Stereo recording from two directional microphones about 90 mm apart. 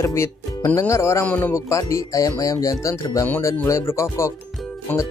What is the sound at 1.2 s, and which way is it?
Speech, 20° left (ahead or behind).